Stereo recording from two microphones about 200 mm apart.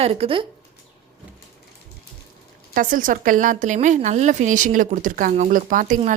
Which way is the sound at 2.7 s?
40° right (ahead or behind).